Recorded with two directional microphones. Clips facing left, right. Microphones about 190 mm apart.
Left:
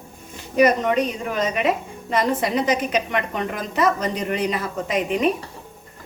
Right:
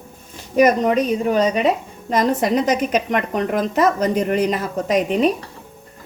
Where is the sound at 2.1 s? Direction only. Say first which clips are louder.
Right 4 dB; 40° right (ahead or behind).